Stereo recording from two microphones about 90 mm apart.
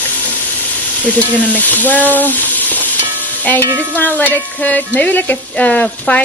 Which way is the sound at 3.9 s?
20° left (ahead or behind).